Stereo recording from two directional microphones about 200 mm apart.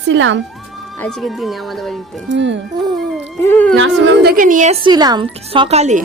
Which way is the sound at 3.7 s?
60° right (ahead or behind).